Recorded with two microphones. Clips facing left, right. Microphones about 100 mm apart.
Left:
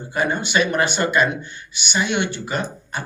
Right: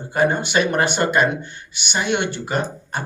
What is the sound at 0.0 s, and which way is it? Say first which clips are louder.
Speech: right 3 dB; 50° right (ahead or behind).